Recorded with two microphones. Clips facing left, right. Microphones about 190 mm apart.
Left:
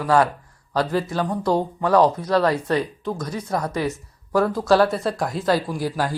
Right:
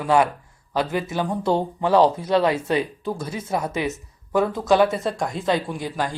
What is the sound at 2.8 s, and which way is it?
Speech, 10° right (ahead or behind).